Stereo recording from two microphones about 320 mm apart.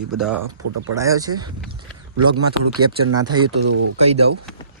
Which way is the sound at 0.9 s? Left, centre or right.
Centre.